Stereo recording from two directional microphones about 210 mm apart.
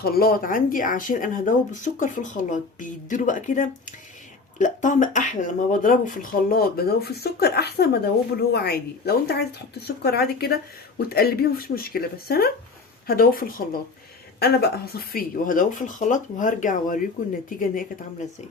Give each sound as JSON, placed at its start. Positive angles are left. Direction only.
{"t": 0.0, "sound": "speech", "side_deg": 45}